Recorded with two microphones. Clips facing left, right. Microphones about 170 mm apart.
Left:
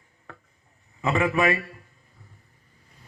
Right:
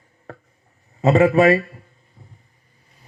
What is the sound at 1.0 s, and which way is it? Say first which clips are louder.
Speech: right 9 dB; 35° right (ahead or behind).